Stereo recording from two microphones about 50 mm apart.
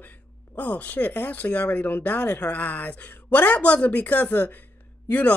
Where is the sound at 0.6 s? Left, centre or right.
Left.